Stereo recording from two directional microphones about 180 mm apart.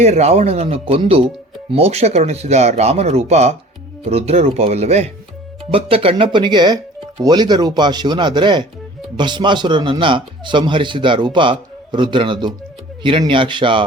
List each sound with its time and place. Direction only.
0.0 s a man's voice: 35° right (ahead or behind)